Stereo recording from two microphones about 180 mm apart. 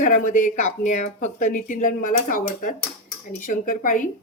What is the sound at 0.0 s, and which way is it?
Speech, 45° left (ahead or behind).